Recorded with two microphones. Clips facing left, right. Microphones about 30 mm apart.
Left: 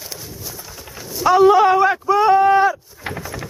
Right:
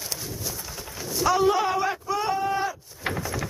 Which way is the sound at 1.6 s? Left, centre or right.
Left.